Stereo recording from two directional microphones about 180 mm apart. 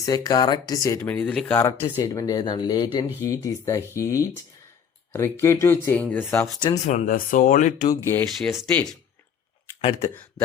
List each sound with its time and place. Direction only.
0.0 s speech: 20° left (ahead or behind)
6.8 s speech: 45° left (ahead or behind)
8.3 s speech: centre (ahead or behind)